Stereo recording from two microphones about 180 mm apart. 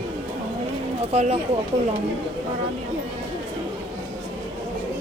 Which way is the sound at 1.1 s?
35° right (ahead or behind).